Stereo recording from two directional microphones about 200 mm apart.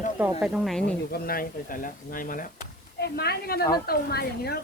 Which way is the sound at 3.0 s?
50° left (ahead or behind).